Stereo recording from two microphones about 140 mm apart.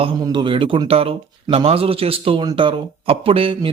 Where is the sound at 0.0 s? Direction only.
35° right (ahead or behind).